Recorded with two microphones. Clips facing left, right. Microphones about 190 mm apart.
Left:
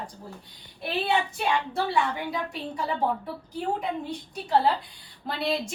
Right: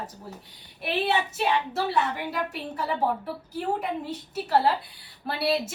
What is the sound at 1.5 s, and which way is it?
Speech, 5° right (ahead or behind).